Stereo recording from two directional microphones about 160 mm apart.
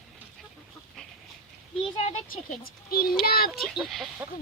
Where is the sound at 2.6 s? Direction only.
70° left (ahead or behind).